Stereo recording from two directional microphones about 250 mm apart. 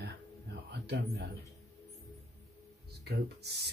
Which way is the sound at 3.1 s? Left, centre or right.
Right.